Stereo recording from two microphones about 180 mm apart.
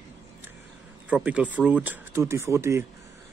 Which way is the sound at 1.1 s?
5° right (ahead or behind).